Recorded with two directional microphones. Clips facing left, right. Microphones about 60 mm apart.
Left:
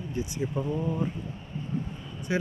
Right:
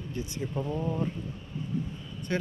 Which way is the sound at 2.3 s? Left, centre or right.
Centre.